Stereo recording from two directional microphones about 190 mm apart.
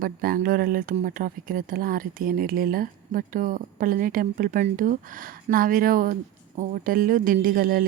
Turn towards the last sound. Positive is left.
turn(degrees=-50)  # may be behind; listen again after turning